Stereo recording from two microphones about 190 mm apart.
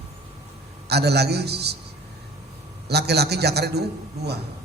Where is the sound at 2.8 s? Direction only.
60° right (ahead or behind).